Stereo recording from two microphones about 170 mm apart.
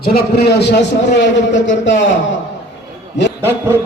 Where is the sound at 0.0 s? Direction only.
65° left (ahead or behind); by 2.0 s 90° left.